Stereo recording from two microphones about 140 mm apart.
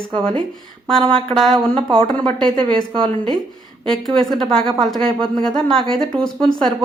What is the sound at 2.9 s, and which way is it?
Speech, 40° right (ahead or behind).